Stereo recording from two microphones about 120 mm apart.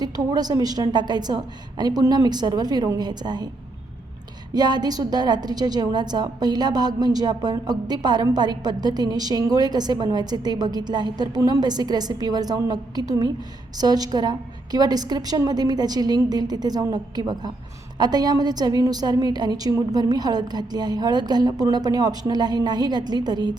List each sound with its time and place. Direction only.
0.0 s a woman's voice: 35° right (ahead or behind)
4.5 s a woman's voice: 35° right (ahead or behind)